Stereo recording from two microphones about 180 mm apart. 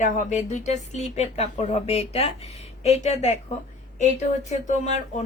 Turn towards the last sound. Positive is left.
turn(degrees=40)  # may be behind; listen again after turning